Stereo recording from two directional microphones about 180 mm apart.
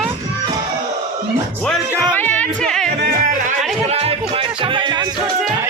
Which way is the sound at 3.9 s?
35° right (ahead or behind).